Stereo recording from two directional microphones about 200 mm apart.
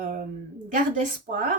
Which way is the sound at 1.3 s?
40° right (ahead or behind).